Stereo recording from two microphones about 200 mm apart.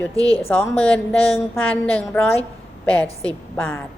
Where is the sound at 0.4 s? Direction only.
10° left (ahead or behind).